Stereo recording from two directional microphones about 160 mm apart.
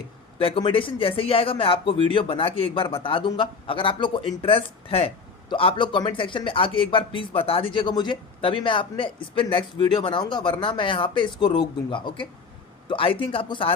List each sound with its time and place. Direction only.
0.3 s a man's voice: 35° left (ahead or behind)